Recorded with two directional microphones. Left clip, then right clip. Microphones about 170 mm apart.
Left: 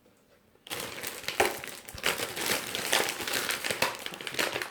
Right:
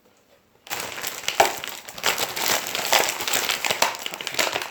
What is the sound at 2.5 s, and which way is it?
Crumpling, 15° left (ahead or behind).